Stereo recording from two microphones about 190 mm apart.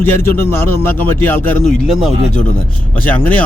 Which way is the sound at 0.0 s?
10° left (ahead or behind).